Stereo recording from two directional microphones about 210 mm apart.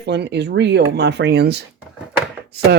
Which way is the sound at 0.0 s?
55° right (ahead or behind).